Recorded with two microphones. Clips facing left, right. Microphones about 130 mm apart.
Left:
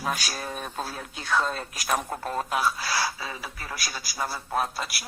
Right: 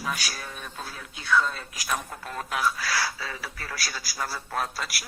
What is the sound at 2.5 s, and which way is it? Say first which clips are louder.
Speech: right 1 dB; 25° left (ahead or behind).